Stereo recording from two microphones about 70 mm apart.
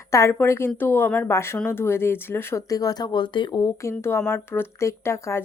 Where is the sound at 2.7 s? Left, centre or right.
Left.